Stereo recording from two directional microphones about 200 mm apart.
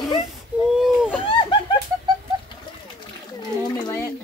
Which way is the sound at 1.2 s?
25° left (ahead or behind).